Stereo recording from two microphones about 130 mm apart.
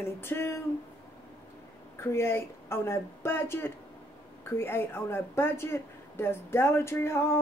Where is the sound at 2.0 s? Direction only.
20° left (ahead or behind).